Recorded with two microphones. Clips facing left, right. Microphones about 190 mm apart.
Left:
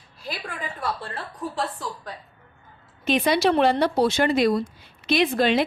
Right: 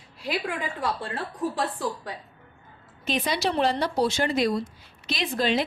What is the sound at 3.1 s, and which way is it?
Speech, 60° left (ahead or behind).